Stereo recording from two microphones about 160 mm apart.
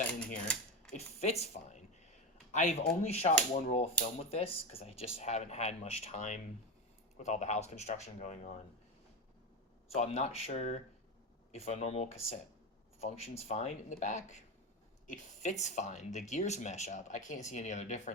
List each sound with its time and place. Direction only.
0.4 s mechanisms: 5° left (ahead or behind)
0.9 s a sound: 40° left (ahead or behind)
2.5 s a man's voice: 45° left (ahead or behind)
9.9 s speech: 40° left (ahead or behind)